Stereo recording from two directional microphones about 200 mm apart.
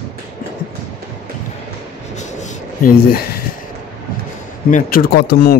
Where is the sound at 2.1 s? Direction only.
35° left (ahead or behind).